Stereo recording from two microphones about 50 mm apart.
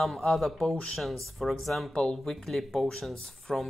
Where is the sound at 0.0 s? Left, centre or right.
Centre.